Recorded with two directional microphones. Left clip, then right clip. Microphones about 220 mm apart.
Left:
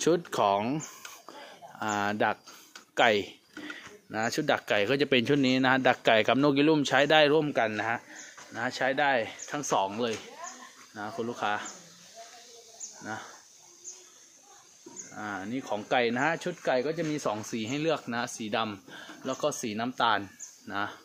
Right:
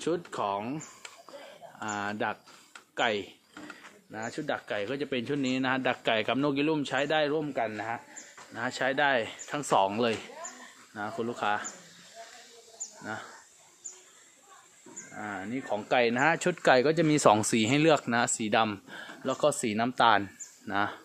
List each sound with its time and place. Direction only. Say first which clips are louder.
0.0 s speech: left 6 dB; 35° left (ahead or behind)
4.1 s speech: left 6 dB; 50° left (ahead or behind)
8.5 s speech: even; centre (ahead or behind)
9.8 s speech: right 3 dB; 30° right (ahead or behind)
11.0 s speech: even; 10° right (ahead or behind)
13.0 s speech: even; 5° right (ahead or behind)
15.1 s speech: left 1 dB; centre (ahead or behind)
16.6 s speech: right 6 dB; 50° right (ahead or behind); by 21.0 s 25° right (ahead or behind)